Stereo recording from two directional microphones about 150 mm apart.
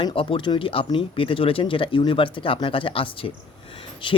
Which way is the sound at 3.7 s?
35° left (ahead or behind).